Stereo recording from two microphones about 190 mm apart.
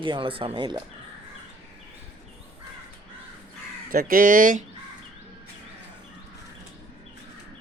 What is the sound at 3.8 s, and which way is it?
Speech, 50° right (ahead or behind).